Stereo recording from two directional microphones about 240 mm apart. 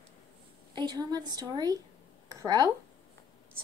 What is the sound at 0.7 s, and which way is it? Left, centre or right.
A woman's voice, centre.